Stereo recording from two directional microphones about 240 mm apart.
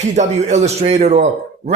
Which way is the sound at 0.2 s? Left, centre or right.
Right.